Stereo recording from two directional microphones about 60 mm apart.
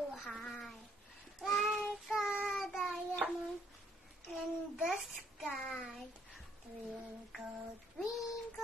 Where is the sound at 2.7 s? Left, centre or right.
Centre.